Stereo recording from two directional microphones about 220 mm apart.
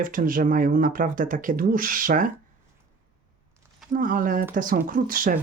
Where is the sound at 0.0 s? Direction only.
40° right (ahead or behind).